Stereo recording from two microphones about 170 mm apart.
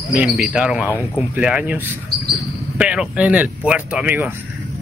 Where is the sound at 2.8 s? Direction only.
5° right (ahead or behind).